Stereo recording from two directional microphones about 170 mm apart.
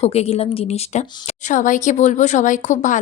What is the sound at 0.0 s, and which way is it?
Speech, 35° left (ahead or behind).